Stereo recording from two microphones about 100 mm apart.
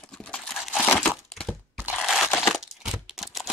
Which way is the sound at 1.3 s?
5° left (ahead or behind).